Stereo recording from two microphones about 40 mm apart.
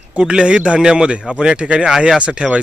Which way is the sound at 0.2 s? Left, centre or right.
Right.